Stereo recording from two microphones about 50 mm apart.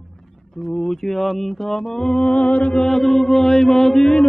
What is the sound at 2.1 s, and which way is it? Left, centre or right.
Mantra, centre.